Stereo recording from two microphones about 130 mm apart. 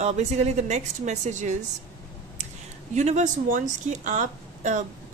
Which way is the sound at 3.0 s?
65° right (ahead or behind).